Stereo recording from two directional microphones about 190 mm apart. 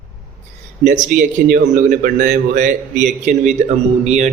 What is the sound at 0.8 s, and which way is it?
A man's voice, 45° right (ahead or behind).